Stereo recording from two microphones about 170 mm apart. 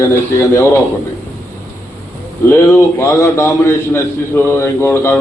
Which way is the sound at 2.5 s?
15° left (ahead or behind).